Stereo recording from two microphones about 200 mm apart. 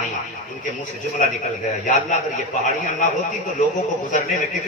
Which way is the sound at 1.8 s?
40° left (ahead or behind).